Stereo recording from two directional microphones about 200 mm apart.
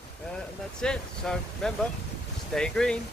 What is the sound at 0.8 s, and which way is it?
Speech, 5° left (ahead or behind).